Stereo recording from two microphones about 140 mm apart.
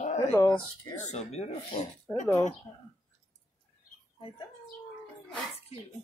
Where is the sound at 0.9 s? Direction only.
55° left (ahead or behind).